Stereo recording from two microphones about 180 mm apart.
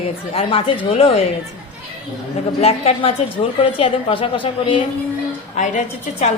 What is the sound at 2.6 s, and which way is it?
A woman's voice, 35° left (ahead or behind).